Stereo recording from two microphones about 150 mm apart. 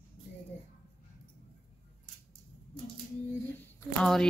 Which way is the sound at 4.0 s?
5° left (ahead or behind).